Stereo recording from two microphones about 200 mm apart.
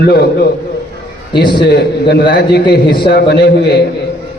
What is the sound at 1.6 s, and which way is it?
A man's voice, 55° left (ahead or behind).